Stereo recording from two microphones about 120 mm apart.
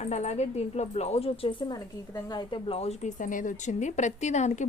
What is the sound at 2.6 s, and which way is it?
A woman's voice, 55° left (ahead or behind).